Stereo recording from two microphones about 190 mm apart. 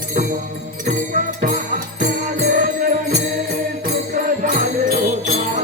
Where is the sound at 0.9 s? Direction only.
40° right (ahead or behind).